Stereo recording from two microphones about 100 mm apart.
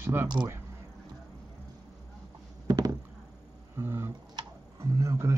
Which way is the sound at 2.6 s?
40° right (ahead or behind).